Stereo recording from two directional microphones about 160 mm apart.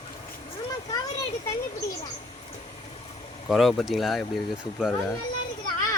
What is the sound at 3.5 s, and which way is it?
Speech, centre (ahead or behind).